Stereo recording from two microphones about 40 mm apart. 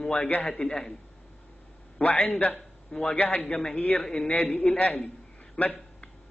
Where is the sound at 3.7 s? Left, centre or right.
Left.